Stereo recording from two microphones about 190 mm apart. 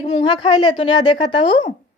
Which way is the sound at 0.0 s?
25° left (ahead or behind).